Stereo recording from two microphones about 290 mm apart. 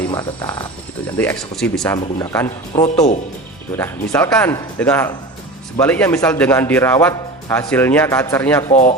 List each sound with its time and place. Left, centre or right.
0.0 s a man's voice: centre
8.7 s speech: left